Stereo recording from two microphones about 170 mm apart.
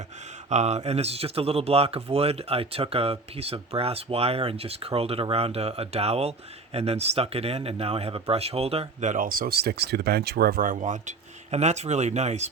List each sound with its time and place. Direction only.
0.5 s speech: 40° right (ahead or behind)